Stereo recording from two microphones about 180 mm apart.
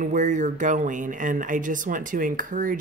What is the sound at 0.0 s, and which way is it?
Speech, 45° right (ahead or behind).